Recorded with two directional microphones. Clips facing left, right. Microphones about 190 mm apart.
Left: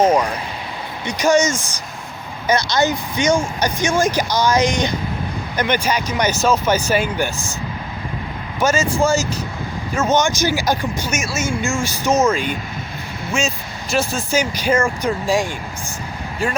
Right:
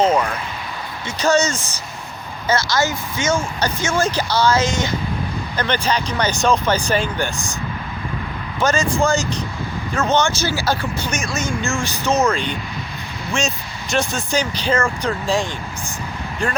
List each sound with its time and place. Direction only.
0.0 s speech: 10° left (ahead or behind)
8.5 s speech: 10° left (ahead or behind)
13.9 s speech: centre (ahead or behind)